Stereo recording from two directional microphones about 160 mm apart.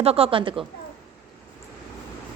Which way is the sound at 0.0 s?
40° right (ahead or behind).